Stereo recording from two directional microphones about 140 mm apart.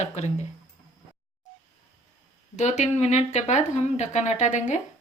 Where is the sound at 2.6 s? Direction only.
55° left (ahead or behind).